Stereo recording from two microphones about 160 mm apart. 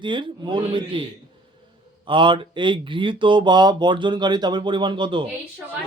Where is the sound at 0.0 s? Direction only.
30° right (ahead or behind).